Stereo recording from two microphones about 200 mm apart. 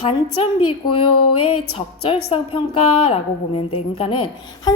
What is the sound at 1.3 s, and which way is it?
Music, 90° left.